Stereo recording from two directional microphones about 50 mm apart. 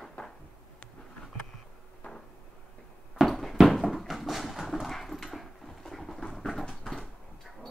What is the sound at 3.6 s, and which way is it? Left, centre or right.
Clip-clop, centre.